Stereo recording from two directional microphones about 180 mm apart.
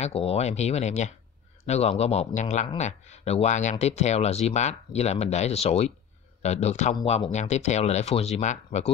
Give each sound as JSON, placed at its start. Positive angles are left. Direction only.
{"t": 0.0, "sound": "speech", "side_deg": 35}